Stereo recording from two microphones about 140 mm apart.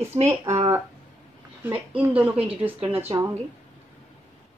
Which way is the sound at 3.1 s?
40° right (ahead or behind).